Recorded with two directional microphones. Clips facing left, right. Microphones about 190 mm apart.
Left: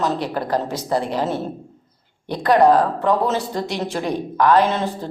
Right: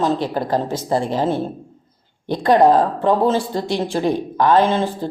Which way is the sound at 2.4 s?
25° right (ahead or behind).